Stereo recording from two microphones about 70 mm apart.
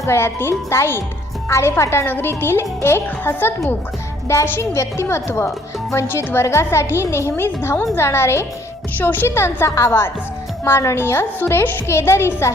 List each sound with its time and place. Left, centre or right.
0.0 s speech: left
9.0 s speech: left